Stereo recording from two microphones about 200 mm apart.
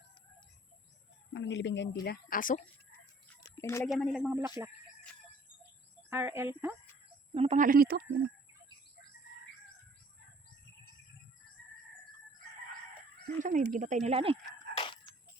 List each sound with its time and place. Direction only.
1.3 s speech: 65° left (ahead or behind)
2.0 s speech: 45° left (ahead or behind)
3.5 s speech: 15° left (ahead or behind)
3.9 s speech: centre (ahead or behind)
4.3 s speech: 10° right (ahead or behind)
6.1 s speech: 10° right (ahead or behind)
7.3 s speech: 35° right (ahead or behind); by 8.0 s 50° right (ahead or behind)
13.4 s speech: 40° right (ahead or behind)
14.8 s a sound: 25° left (ahead or behind)